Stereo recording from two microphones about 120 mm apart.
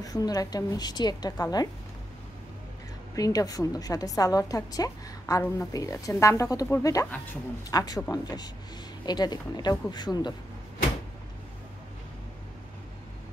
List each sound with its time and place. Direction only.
0.0 s a woman's voice: 30° left (ahead or behind)
3.2 s a woman's voice: 30° left (ahead or behind)